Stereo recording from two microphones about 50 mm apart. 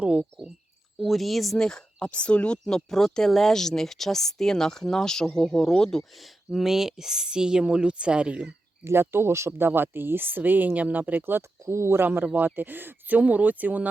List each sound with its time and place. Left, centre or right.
0.0 s speech: centre
0.9 s speech: centre
1.5 s speech: centre
6.1 s speech: centre; by 8.4 s right
8.8 s speech: right
9.5 s speech: right
11.6 s speech: right
12.2 s speech: right